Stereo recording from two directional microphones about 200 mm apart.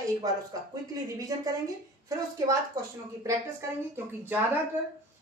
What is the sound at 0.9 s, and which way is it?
A woman's voice, 15° right (ahead or behind).